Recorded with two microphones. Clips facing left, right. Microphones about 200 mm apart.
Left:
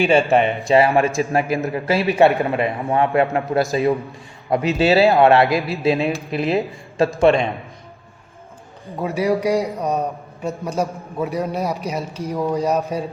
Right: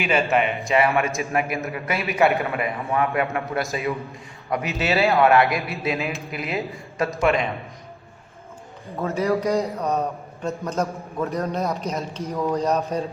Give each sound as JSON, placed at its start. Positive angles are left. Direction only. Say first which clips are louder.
{"t": 0.0, "sound": "a man's voice", "louder": "left 6 dB", "side_deg": 30}
{"t": 9.0, "sound": "a man's voice", "louder": "left 3 dB", "side_deg": 15}